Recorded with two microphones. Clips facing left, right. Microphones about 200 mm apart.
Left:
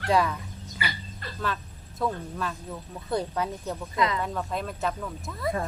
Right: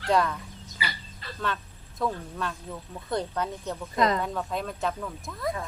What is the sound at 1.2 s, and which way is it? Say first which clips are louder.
Music: left 1 dB; 50° left (ahead or behind).